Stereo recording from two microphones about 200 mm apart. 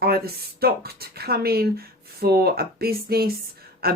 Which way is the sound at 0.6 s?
50° right (ahead or behind).